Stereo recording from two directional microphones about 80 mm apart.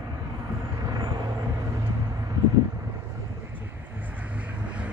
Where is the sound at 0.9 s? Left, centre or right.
Right.